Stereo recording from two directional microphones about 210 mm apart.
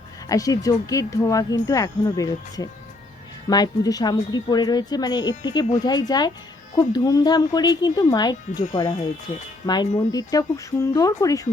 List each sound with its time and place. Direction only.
0.3 s speech: 15° left (ahead or behind)